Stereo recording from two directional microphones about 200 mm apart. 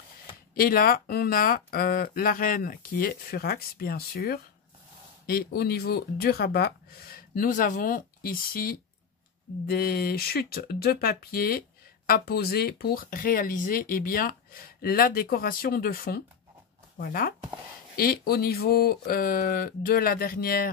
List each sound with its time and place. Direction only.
0.6 s speech: 45° left (ahead or behind)